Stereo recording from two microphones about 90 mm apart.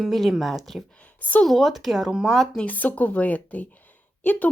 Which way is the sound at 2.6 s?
20° left (ahead or behind).